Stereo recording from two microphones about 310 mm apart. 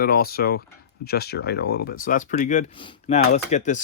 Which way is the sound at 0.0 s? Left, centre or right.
Left.